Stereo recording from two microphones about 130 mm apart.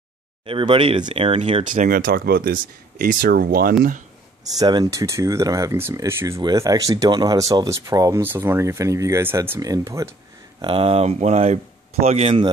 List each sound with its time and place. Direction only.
0.5 s speech: 40° right (ahead or behind)
1.6 s speech: 90° right
4.6 s speech: 30° right (ahead or behind)
10.6 s speech: 45° right (ahead or behind)